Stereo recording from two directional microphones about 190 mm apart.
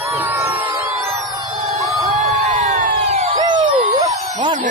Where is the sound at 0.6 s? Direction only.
15° right (ahead or behind).